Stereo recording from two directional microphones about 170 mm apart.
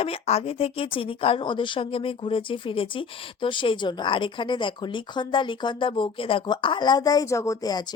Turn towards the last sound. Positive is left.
turn(degrees=20)  # may be behind; listen again after turning